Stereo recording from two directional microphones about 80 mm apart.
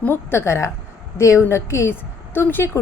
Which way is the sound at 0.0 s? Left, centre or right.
Left.